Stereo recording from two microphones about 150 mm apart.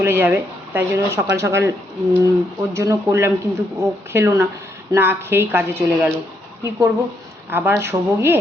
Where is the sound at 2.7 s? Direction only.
15° right (ahead or behind).